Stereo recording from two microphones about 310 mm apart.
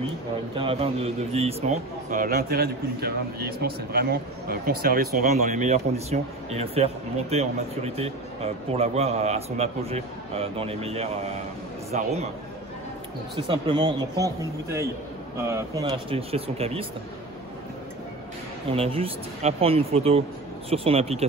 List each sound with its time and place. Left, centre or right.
0.6 s a man's voice: centre
13.4 s speech: centre
18.7 s a man's voice: centre